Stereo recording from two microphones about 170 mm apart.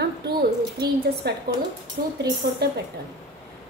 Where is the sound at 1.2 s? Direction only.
75° right (ahead or behind).